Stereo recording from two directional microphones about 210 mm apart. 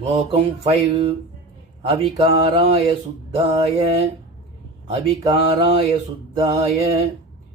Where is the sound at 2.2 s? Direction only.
25° right (ahead or behind).